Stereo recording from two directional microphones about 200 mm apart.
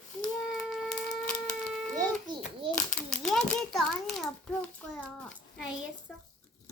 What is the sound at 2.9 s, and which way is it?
A child's voice, 5° left (ahead or behind).